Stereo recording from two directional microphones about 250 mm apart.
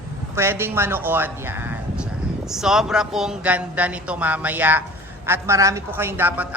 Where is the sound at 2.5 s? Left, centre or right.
Centre.